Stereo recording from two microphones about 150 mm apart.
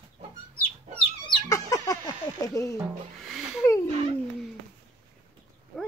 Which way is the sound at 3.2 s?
5° right (ahead or behind).